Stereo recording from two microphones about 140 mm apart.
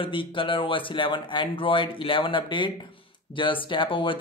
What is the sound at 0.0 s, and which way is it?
Speech, 40° left (ahead or behind).